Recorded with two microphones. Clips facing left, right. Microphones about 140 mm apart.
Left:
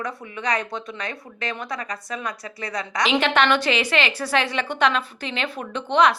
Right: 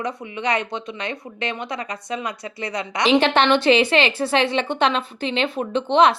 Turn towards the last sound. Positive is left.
turn(degrees=-25)  # may be behind; listen again after turning